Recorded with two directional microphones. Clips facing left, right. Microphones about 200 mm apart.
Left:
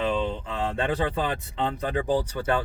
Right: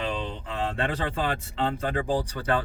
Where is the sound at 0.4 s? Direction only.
20° left (ahead or behind).